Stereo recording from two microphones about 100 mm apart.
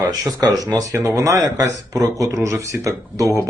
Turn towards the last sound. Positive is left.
turn(degrees=-35)  # may be behind; listen again after turning